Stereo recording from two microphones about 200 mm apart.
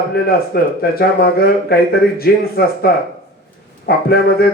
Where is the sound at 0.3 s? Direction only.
50° left (ahead or behind).